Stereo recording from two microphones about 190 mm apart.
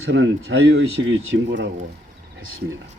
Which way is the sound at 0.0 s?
70° right (ahead or behind).